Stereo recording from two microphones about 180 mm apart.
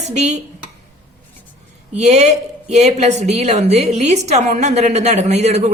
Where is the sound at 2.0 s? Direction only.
40° right (ahead or behind).